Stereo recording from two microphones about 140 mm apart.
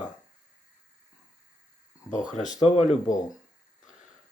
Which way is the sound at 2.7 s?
55° left (ahead or behind).